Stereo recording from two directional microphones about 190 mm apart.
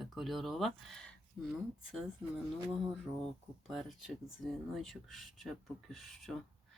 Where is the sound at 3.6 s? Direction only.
Centre (ahead or behind).